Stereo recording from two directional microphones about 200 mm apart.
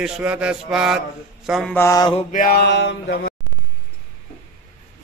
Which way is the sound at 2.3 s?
45° left (ahead or behind).